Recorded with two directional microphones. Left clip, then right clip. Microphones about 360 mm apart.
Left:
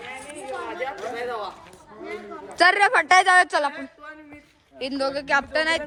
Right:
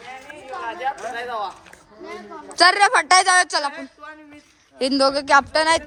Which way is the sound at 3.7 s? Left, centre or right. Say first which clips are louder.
Right 1 dB; right.